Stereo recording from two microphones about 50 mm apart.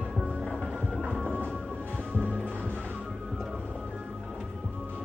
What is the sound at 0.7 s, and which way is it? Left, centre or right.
Music, centre.